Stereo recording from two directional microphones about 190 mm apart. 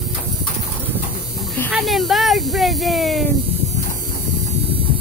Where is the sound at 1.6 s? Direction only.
Centre (ahead or behind).